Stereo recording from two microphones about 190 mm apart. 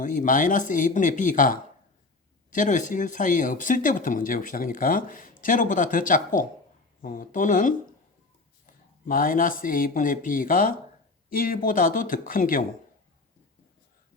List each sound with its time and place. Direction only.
0.0 s speech: 45° left (ahead or behind)
9.0 s speech: 50° left (ahead or behind)